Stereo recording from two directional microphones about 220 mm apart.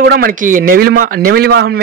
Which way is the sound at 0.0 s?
45° right (ahead or behind).